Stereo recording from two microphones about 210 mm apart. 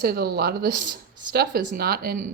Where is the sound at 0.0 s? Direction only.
50° right (ahead or behind).